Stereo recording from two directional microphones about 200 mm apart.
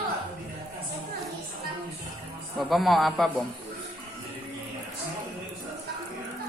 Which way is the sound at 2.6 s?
Centre (ahead or behind).